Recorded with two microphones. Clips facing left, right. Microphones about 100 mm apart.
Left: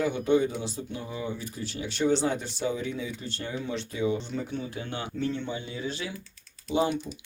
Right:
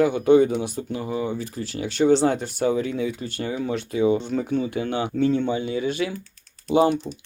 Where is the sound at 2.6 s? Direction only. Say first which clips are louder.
Right 8 dB; 90° right.